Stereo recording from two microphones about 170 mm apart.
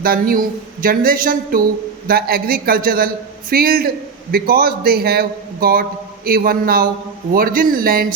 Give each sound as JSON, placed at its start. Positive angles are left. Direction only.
{"t": 0.0, "sound": "a man's voice", "side_deg": -60}